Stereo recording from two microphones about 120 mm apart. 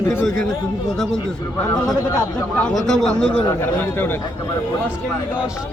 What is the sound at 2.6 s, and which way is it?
A man's voice, 5° left (ahead or behind).